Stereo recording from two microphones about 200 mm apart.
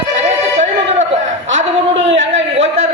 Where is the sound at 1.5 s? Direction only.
65° right (ahead or behind).